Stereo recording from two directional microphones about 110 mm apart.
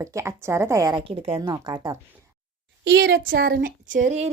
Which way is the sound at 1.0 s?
60° right (ahead or behind).